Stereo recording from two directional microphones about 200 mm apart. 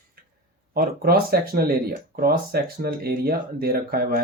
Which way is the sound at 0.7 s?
50° right (ahead or behind).